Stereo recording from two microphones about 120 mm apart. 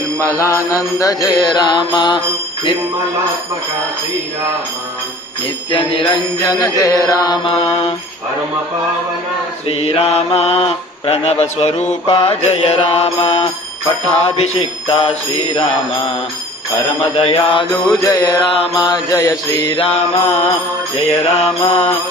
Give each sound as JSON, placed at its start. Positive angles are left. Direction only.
{"t": 0.3, "sound": "mantra", "side_deg": 25}
{"t": 5.7, "sound": "mantra", "side_deg": 45}
{"t": 6.4, "sound": "mantra", "side_deg": 30}
{"t": 7.4, "sound": "mantra", "side_deg": 50}
{"t": 9.6, "sound": "mantra", "side_deg": 50}
{"t": 12.0, "sound": "mantra", "side_deg": 50}
{"t": 17.0, "sound": "mantra", "side_deg": 55}
{"t": 18.0, "sound": "mantra", "side_deg": 30}
{"t": 19.8, "sound": "mantra", "side_deg": 60}
{"t": 21.6, "sound": "mantra", "side_deg": 55}